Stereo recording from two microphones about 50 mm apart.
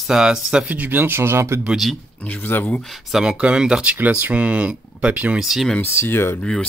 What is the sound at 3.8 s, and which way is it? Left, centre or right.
Speech, right.